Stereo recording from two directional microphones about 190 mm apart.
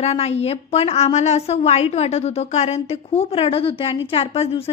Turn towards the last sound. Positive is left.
turn(degrees=30)  # may be behind; listen again after turning